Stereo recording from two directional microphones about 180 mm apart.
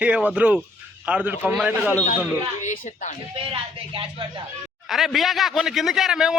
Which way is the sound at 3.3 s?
30° right (ahead or behind).